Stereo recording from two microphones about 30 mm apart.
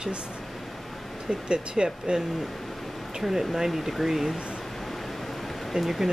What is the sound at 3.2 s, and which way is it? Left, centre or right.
Speech, centre.